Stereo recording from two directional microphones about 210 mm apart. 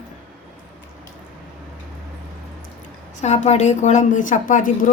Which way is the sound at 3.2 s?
30° left (ahead or behind).